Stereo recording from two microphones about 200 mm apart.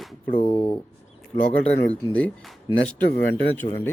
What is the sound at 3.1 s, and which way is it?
Speech, 10° left (ahead or behind).